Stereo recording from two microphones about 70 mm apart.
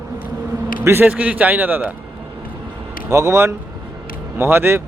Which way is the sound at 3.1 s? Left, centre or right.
Right.